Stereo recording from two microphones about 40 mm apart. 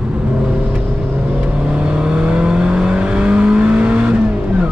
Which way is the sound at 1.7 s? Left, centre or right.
Right.